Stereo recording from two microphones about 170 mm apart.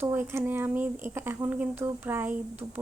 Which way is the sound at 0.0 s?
15° right (ahead or behind).